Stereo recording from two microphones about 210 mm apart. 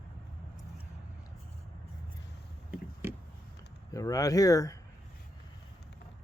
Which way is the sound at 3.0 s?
10° right (ahead or behind).